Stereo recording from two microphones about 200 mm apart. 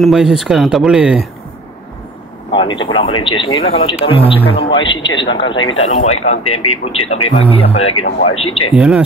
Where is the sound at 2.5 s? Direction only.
25° left (ahead or behind).